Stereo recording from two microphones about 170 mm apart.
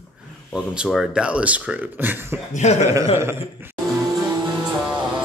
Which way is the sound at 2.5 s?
40° left (ahead or behind).